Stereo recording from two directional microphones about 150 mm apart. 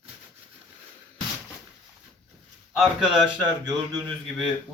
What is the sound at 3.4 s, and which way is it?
Speech, 25° right (ahead or behind).